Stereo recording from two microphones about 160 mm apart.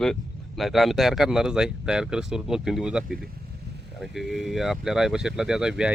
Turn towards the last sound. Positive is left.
turn(degrees=-5)  # may be behind; listen again after turning